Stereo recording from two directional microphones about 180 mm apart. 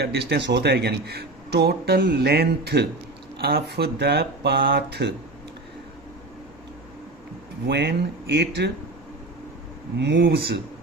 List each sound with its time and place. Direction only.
0.0 s speech: 65° right (ahead or behind)
7.7 s speech: 70° right (ahead or behind)
10.0 s speech: 70° right (ahead or behind)